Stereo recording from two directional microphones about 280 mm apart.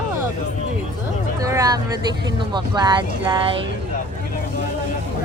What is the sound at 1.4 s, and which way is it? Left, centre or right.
Speech, centre.